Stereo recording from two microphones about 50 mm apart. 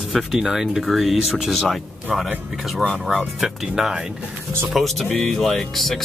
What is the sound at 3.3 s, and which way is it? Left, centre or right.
Speech, centre.